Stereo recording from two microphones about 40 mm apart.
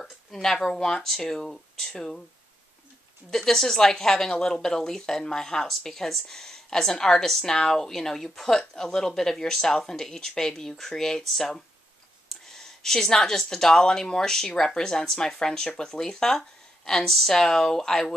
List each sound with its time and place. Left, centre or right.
0.0 s a woman's voice: centre
3.3 s a woman's voice: centre